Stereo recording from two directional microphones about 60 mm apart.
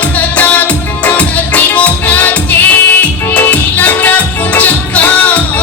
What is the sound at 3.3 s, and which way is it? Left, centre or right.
Music, left.